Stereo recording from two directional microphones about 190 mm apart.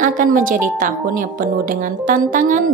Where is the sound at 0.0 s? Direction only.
45° right (ahead or behind).